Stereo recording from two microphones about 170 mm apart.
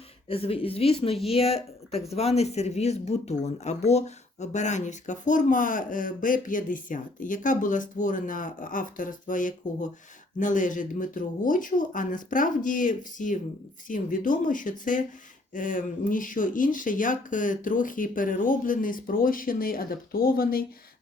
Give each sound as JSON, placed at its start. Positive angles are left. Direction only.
{"t": 0.3, "sound": "a woman's voice", "side_deg": 35}